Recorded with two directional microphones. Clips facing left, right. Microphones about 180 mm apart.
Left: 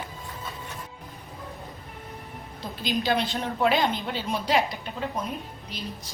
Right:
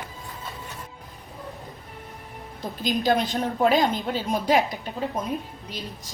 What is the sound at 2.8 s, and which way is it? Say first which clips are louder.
A woman's voice: right 3 dB; 45° right (ahead or behind).